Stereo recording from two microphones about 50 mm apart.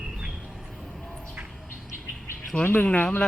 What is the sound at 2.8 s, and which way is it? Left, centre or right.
Speech, left.